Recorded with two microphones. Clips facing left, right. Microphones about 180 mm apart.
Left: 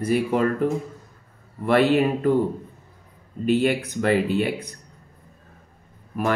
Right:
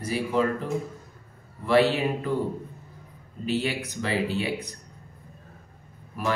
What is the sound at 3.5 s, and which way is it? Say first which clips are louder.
Speech: left 7 dB; 55° left (ahead or behind).